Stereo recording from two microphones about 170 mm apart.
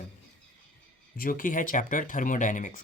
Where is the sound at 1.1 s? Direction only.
55° left (ahead or behind).